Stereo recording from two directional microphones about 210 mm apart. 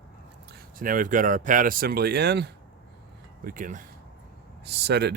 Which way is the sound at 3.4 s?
40° right (ahead or behind).